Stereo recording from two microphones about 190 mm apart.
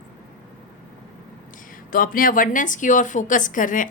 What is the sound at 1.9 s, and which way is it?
A woman's voice, 50° left (ahead or behind).